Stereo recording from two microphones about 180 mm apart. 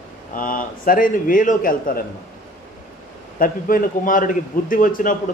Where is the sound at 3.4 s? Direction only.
50° left (ahead or behind).